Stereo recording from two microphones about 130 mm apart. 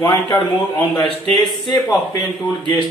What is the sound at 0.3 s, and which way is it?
Speech, 30° left (ahead or behind).